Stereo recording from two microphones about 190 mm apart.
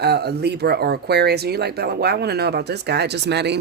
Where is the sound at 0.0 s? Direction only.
60° right (ahead or behind).